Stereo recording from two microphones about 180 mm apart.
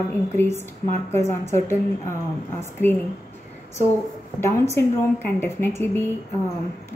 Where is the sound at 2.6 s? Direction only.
10° left (ahead or behind).